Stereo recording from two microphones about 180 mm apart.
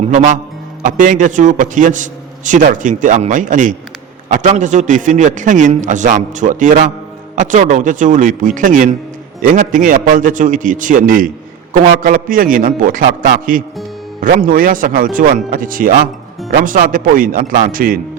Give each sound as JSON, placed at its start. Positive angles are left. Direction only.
{"t": 0.0, "sound": "a man's voice", "side_deg": -45}